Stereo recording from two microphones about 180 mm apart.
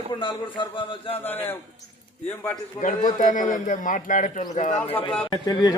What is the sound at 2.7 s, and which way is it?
A man's voice, 45° left (ahead or behind).